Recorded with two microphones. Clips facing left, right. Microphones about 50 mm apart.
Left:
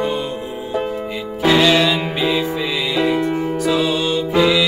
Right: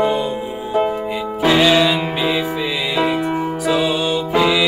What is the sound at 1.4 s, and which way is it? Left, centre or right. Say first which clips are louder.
Music: even; centre.